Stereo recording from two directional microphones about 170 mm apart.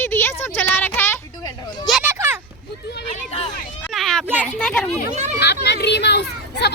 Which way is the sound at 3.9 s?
5° left (ahead or behind).